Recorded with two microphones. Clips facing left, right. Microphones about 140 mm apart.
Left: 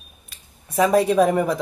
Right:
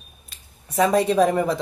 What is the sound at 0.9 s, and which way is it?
Speech, centre (ahead or behind).